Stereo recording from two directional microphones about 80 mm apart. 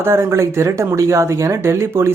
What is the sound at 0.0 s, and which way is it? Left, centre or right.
Speech, right.